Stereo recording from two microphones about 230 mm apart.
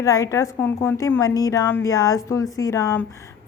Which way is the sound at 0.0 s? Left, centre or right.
Centre.